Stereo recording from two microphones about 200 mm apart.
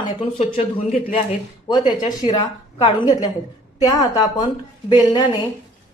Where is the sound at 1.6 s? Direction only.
20° left (ahead or behind).